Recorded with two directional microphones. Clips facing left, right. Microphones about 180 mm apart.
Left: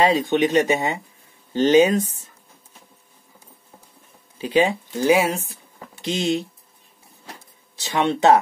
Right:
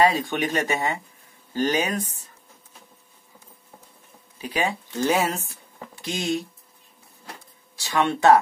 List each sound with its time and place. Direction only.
0.0 s speech: 25° left (ahead or behind)
4.4 s speech: 25° left (ahead or behind)
4.9 s speech: 10° left (ahead or behind)
6.0 s speech: 25° left (ahead or behind)
7.7 s speech: 20° left (ahead or behind)